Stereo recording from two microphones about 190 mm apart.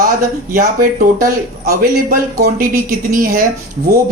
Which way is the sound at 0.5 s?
45° right (ahead or behind).